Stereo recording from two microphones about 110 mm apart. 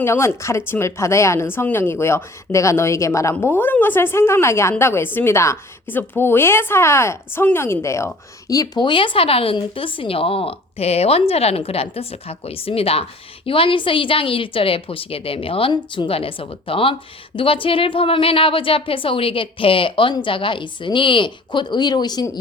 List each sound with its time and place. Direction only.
0.0 s a woman's voice: 25° left (ahead or behind)